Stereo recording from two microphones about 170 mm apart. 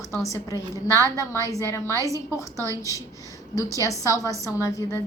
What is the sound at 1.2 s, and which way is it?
A woman's voice, 20° left (ahead or behind).